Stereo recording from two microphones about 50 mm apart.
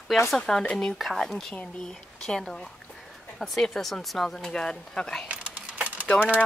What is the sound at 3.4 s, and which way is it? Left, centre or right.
Speech, centre.